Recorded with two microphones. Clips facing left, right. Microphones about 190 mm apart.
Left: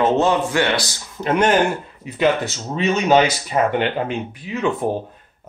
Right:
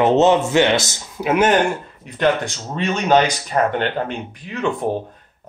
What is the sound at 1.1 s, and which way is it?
Speech, 5° right (ahead or behind).